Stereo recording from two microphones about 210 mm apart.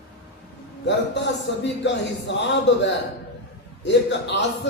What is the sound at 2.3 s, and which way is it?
Speech, 55° left (ahead or behind).